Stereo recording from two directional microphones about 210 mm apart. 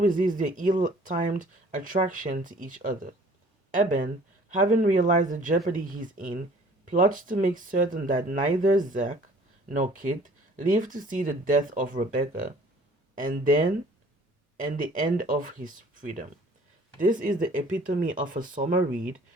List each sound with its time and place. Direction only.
0.0 s speech: 40° right (ahead or behind)